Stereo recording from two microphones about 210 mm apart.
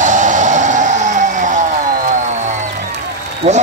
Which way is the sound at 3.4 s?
30° right (ahead or behind).